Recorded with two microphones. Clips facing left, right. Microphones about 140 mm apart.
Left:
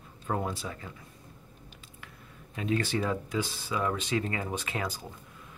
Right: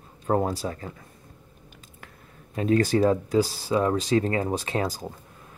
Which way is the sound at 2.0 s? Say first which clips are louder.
Right 2 dB; 40° right (ahead or behind).